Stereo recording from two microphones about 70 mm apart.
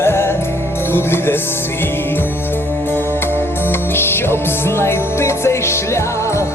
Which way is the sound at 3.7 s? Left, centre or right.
Left.